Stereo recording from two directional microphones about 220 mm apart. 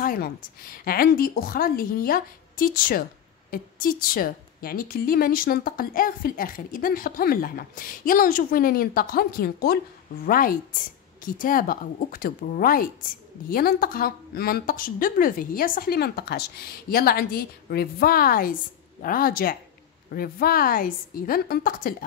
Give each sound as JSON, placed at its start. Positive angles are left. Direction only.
{"t": 0.0, "sound": "a woman's voice", "side_deg": 40}